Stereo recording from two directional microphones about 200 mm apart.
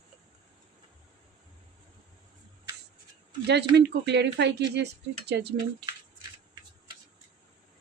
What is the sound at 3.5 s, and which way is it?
Speech, 55° right (ahead or behind).